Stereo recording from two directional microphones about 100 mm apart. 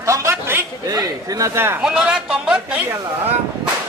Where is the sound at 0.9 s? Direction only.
35° right (ahead or behind).